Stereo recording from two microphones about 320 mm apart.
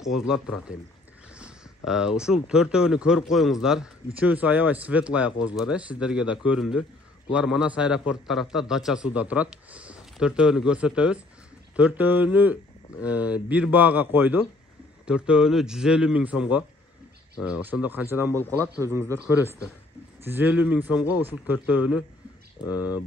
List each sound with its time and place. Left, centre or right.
0.3 s a man's voice: centre